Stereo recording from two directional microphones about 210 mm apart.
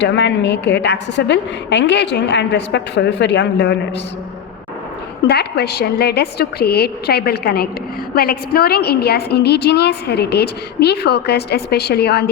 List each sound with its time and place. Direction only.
0.0 s a woman's voice: 55° left (ahead or behind)
5.2 s a woman's voice: 50° left (ahead or behind)